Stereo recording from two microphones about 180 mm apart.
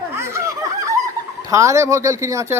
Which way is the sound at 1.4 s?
15° right (ahead or behind).